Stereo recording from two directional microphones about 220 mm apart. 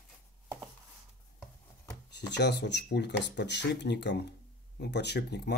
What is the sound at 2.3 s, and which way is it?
Speech, 50° left (ahead or behind).